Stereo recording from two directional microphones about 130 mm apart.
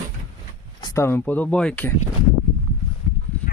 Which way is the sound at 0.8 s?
30° left (ahead or behind).